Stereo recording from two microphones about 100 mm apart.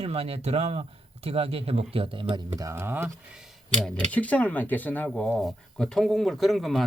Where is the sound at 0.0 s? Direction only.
85° right; by 2.4 s 60° right (ahead or behind).